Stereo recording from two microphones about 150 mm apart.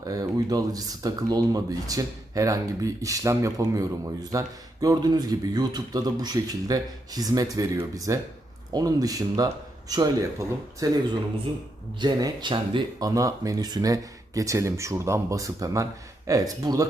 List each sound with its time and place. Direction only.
0.0 s speech: 25° right (ahead or behind)